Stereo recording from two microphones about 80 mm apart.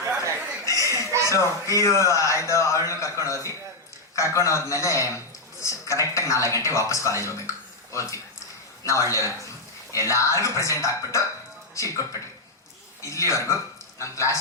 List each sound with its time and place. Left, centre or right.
0.0 s chuckle: right
0.6 s laughter: left
1.0 s a sound: right
1.3 s a man's voice: left